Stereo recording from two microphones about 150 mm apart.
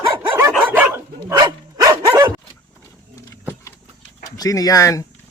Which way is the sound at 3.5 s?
15° left (ahead or behind).